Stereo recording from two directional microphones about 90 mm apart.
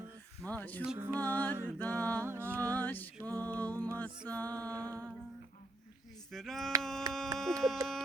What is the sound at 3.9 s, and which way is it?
Mantra, 20° left (ahead or behind).